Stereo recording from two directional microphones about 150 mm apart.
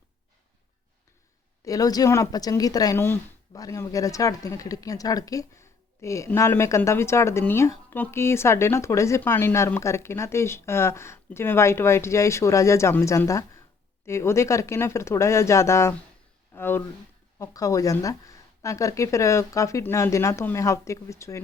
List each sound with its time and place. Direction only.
1.6 s speech: 25° left (ahead or behind)